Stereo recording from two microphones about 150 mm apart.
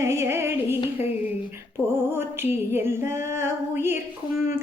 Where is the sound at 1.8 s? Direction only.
15° right (ahead or behind).